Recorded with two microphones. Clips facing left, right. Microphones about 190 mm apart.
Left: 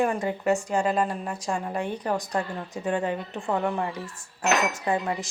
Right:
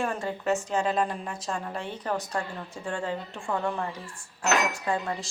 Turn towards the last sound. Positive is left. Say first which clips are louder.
# left 3 dB
turn(degrees=20)  # may be behind; listen again after turning